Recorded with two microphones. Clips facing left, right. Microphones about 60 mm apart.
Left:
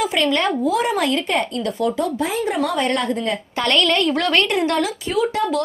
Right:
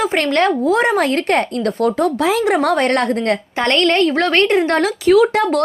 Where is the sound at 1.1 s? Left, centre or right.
Right.